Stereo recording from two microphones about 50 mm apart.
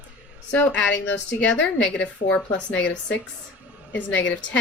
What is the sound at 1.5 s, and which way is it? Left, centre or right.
Speech, left.